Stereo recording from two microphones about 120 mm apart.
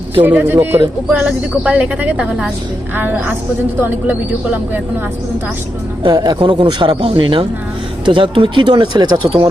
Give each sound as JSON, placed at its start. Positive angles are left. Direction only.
{"t": 0.2, "sound": "speech", "side_deg": -15}
{"t": 6.0, "sound": "a man's voice", "side_deg": -40}